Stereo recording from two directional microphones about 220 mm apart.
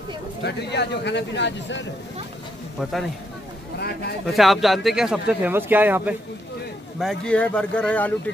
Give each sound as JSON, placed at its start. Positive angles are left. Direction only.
{"t": 0.4, "sound": "speech", "side_deg": 50}
{"t": 2.8, "sound": "speech", "side_deg": 0}
{"t": 4.3, "sound": "speech", "side_deg": 0}
{"t": 7.0, "sound": "speech", "side_deg": 0}